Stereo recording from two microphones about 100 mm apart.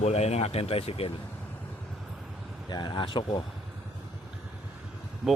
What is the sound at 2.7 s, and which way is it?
Speech, 50° left (ahead or behind).